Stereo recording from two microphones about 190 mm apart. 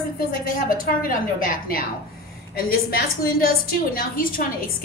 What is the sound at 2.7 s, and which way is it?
A woman's voice, 50° left (ahead or behind).